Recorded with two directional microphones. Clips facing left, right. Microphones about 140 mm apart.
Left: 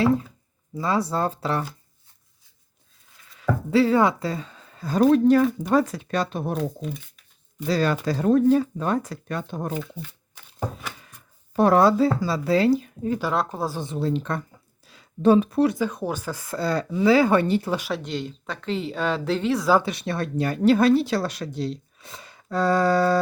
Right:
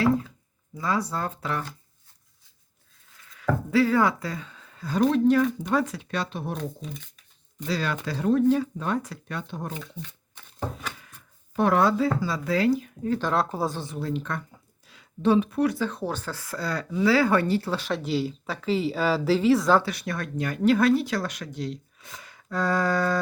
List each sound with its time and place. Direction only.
0.8 s speech: 30° left (ahead or behind)
3.3 s speech: 25° left (ahead or behind); by 6.6 s 45° left (ahead or behind)
7.7 s speech: 40° left (ahead or behind)
10.0 s a sound: 5° left (ahead or behind)
11.5 s speech: 35° left (ahead or behind)
13.1 s speech: 5° left (ahead or behind)
13.7 s speech: 25° left (ahead or behind)
14.8 s a sound: 40° left (ahead or behind)
15.8 s speech: 10° left (ahead or behind)
17.9 s speech: 5° right (ahead or behind)
19.8 s speech: 25° left (ahead or behind)